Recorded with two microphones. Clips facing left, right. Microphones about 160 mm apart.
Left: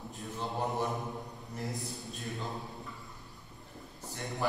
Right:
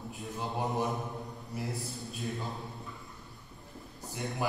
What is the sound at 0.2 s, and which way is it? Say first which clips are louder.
Mantra: even; 20° right (ahead or behind).